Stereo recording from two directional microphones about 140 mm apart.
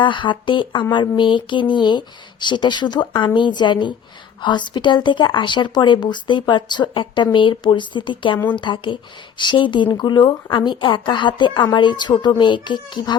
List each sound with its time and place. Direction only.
0.0 s a woman's voice: 35° left (ahead or behind)